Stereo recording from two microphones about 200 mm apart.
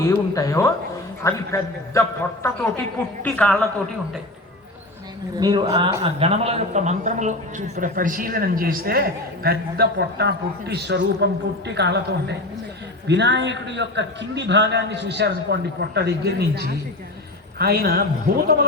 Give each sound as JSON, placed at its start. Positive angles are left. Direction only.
{"t": 0.1, "sound": "a man's voice", "side_deg": 15}
{"t": 5.4, "sound": "a woman's voice", "side_deg": -20}
{"t": 6.0, "sound": "a man's voice", "side_deg": -30}
{"t": 13.1, "sound": "a man's voice", "side_deg": -60}